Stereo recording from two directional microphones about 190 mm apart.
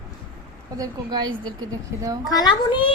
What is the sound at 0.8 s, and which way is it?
A woman's voice, 20° right (ahead or behind).